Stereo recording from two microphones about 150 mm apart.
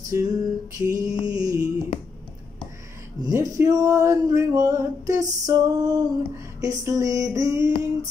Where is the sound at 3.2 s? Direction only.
20° right (ahead or behind).